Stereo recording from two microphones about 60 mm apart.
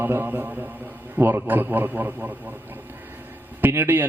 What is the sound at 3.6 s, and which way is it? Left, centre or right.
Speech, right.